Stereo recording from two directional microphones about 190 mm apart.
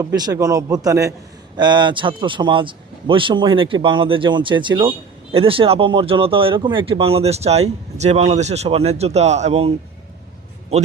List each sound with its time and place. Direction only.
0.0 s a man's voice: 20° right (ahead or behind)